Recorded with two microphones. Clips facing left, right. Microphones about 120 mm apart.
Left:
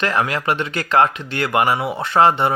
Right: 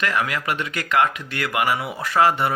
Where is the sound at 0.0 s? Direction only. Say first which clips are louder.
Left 4 dB; 30° left (ahead or behind).